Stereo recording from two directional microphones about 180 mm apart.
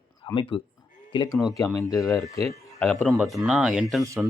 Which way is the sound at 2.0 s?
Centre (ahead or behind).